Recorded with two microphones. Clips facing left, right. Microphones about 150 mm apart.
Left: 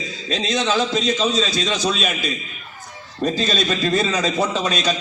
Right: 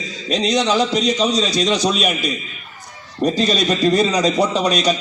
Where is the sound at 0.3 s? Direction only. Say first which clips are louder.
Right 4 dB; 15° right (ahead or behind).